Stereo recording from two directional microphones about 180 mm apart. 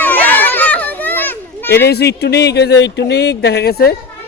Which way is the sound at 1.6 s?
65° left (ahead or behind).